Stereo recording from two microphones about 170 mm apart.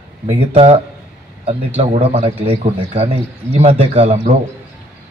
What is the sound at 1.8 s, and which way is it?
A man's voice, 35° right (ahead or behind).